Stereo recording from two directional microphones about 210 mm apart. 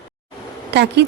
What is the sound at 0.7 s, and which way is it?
Speech, 55° right (ahead or behind).